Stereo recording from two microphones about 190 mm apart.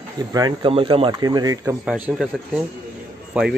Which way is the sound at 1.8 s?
5° right (ahead or behind).